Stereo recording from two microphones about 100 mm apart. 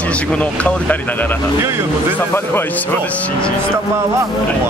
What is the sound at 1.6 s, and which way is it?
Speech, 25° right (ahead or behind).